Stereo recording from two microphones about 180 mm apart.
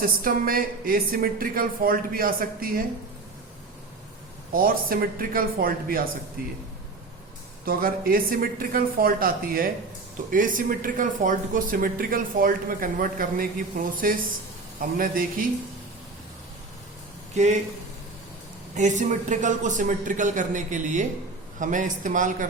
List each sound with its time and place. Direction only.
0.0 s speech: 55° right (ahead or behind)
4.5 s speech: 55° right (ahead or behind)
7.6 s speech: 55° right (ahead or behind)
17.3 s speech: 40° right (ahead or behind)
18.7 s speech: 45° right (ahead or behind)